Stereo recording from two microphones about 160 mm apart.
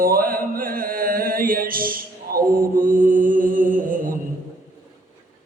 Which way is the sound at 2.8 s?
55° right (ahead or behind).